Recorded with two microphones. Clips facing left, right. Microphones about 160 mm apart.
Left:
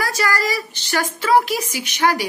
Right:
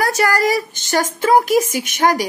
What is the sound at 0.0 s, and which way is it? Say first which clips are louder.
Speech: right 5 dB; 45° right (ahead or behind).